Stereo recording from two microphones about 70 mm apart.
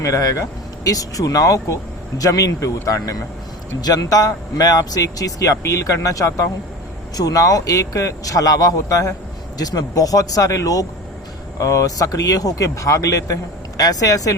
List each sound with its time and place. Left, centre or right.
0.0 s a man's voice: left
3.8 s a man's voice: left